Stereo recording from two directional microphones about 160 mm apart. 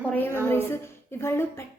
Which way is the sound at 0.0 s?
10° left (ahead or behind).